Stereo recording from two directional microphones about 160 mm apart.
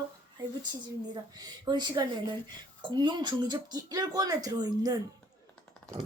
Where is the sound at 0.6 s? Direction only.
25° right (ahead or behind).